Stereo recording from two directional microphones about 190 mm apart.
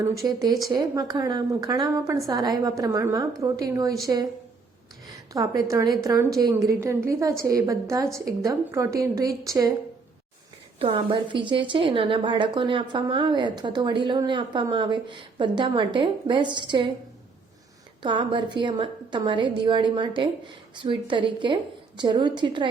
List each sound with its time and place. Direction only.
0.0 s a woman's voice: 15° right (ahead or behind)
5.3 s a woman's voice: 15° right (ahead or behind)
10.8 s a woman's voice: 25° right (ahead or behind)
18.0 s a woman's voice: 25° right (ahead or behind)